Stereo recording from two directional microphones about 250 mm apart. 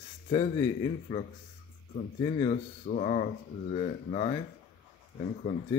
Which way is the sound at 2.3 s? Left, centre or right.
Left.